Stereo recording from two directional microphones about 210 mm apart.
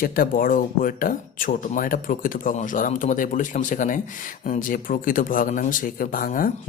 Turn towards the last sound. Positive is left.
turn(degrees=40)  # may be behind; listen again after turning